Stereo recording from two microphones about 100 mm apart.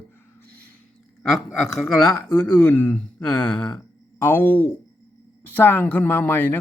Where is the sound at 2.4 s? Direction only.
15° left (ahead or behind).